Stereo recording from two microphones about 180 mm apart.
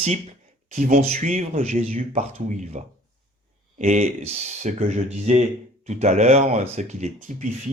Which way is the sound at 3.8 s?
40° right (ahead or behind).